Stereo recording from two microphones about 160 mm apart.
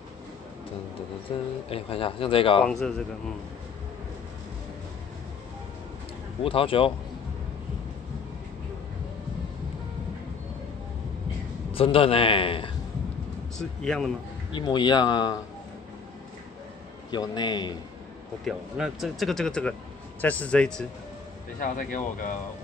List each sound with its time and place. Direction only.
1.3 s a man's voice: 35° left (ahead or behind)
2.6 s speech: 5° left (ahead or behind)
6.4 s a man's voice: 35° left (ahead or behind)
11.7 s a man's voice: 35° left (ahead or behind)
13.6 s speech: 5° left (ahead or behind)
14.5 s speech: 25° left (ahead or behind)
17.1 s speech: 25° left (ahead or behind)
18.4 s a man's voice: centre (ahead or behind)
21.5 s speech: 55° left (ahead or behind)